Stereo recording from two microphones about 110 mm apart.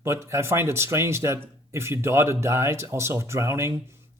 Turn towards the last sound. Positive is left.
turn(degrees=-25)  # may be behind; listen again after turning